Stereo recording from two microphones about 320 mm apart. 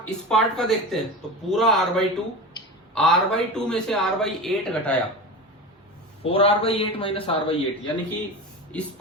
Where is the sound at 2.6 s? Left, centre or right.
Centre.